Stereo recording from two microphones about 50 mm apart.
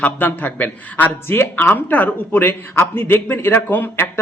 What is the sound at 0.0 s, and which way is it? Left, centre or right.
A man's voice, left.